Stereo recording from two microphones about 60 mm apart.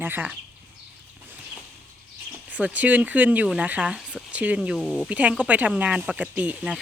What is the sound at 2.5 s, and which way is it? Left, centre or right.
Speech, right.